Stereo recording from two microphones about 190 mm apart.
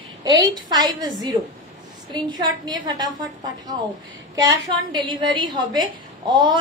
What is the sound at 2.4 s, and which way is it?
A woman's voice, 20° right (ahead or behind).